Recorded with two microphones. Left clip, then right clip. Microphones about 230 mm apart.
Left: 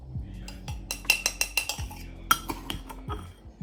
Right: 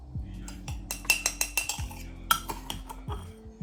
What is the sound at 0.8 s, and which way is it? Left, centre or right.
Cutlery, centre.